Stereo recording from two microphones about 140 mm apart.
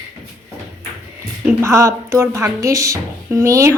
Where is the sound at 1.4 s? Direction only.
20° right (ahead or behind).